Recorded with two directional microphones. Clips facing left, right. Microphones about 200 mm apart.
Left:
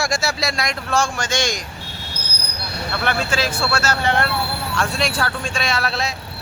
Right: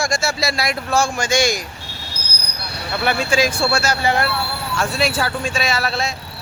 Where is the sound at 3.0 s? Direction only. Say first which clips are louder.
Right 4 dB; 10° right (ahead or behind).